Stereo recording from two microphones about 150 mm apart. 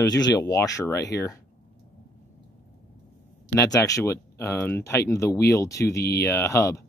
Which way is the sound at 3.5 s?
20° left (ahead or behind).